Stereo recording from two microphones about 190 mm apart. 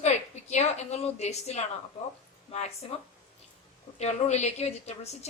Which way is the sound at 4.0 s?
35° left (ahead or behind).